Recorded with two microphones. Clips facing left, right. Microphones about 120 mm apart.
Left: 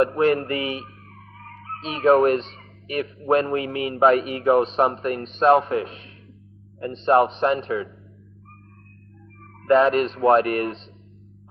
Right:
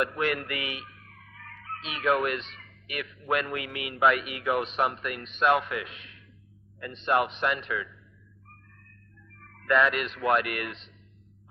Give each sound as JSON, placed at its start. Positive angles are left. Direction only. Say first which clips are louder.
{"t": 0.0, "sound": "speech", "louder": "left 9 dB", "side_deg": 35}
{"t": 9.6, "sound": "speech", "louder": "left 8 dB", "side_deg": 35}